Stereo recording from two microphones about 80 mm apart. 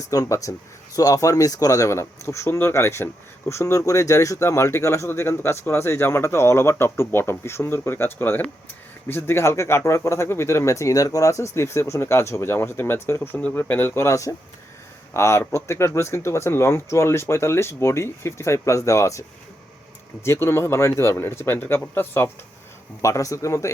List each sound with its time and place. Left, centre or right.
0.1 s speech: left
20.2 s speech: left
23.0 s speech: left